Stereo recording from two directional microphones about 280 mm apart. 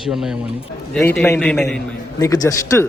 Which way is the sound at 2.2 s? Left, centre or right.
Centre.